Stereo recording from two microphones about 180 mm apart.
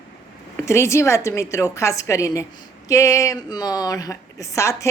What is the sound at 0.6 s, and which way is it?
A woman's voice, 15° left (ahead or behind).